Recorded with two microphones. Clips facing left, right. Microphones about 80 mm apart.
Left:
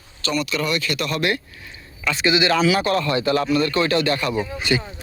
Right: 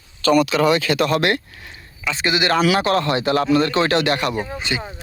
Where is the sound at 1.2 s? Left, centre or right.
Right.